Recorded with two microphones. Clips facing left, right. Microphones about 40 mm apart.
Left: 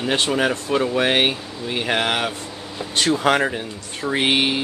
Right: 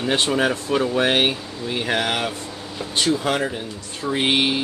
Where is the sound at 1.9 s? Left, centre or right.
Left.